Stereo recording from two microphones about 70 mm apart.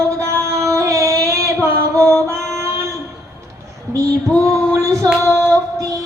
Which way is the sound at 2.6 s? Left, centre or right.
Right.